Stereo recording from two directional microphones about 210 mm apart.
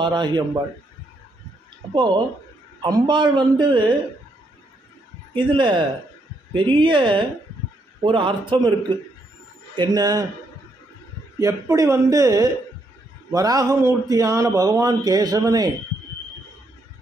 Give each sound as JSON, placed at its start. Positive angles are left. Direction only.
{"t": 0.0, "sound": "a man's voice", "side_deg": -20}
{"t": 2.0, "sound": "a man's voice", "side_deg": -20}
{"t": 5.3, "sound": "a man's voice", "side_deg": -25}
{"t": 11.3, "sound": "speech", "side_deg": -15}